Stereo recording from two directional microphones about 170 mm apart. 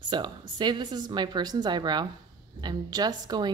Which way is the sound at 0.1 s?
25° right (ahead or behind).